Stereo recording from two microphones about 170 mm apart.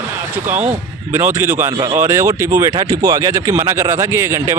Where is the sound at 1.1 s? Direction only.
15° right (ahead or behind).